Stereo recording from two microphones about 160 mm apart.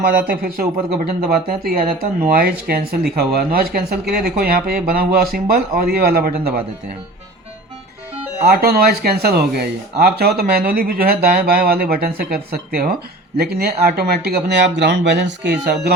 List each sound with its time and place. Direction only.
0.0 s speech: 65° right (ahead or behind)
8.4 s speech: 75° right (ahead or behind)
13.3 s speech: 85° right